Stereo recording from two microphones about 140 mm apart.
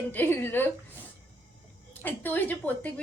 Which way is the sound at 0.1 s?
15° left (ahead or behind).